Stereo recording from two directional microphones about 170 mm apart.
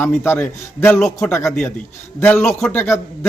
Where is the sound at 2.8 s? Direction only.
15° left (ahead or behind).